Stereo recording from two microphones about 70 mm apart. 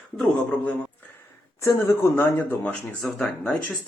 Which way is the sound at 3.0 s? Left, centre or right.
Centre.